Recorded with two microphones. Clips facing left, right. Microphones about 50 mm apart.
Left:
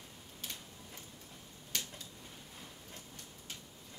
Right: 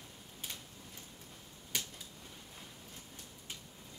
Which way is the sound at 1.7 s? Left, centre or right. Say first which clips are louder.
Right 1 dB; centre.